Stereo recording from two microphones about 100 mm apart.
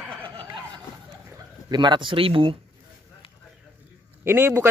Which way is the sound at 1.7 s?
50° right (ahead or behind).